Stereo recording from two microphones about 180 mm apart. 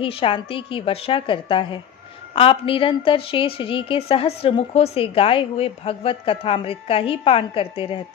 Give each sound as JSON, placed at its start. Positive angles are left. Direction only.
{"t": 0.0, "sound": "a woman's voice", "side_deg": 30}